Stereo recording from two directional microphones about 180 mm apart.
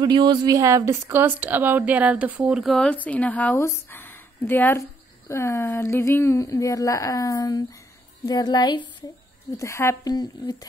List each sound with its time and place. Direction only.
0.0 s a woman's voice: 25° right (ahead or behind); by 10.7 s 20° left (ahead or behind)